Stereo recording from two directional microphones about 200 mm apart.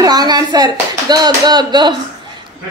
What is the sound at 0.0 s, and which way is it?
A woman's voice, 20° right (ahead or behind).